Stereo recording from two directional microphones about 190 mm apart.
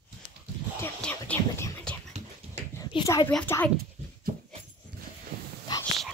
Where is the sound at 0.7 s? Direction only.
10° left (ahead or behind).